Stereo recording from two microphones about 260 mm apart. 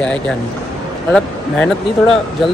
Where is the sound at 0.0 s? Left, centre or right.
Centre.